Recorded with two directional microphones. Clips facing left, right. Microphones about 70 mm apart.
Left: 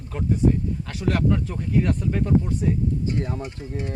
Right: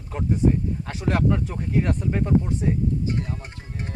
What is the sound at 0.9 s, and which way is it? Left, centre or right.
Speech, right.